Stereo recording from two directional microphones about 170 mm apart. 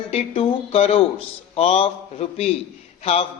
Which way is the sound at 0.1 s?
35° left (ahead or behind).